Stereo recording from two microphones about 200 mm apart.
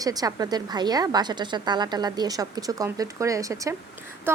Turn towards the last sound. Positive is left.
turn(degrees=-10)  # may be behind; listen again after turning